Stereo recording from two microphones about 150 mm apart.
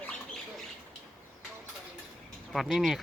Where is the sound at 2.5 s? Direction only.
Centre (ahead or behind).